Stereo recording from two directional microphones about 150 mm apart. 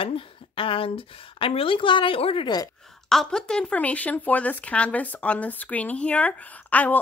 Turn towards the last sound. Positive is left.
turn(degrees=10)  # may be behind; listen again after turning